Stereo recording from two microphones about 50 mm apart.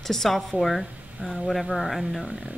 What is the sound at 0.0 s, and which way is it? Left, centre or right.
Speech, centre.